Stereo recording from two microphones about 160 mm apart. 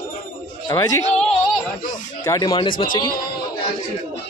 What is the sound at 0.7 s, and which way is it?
Speech, 25° left (ahead or behind).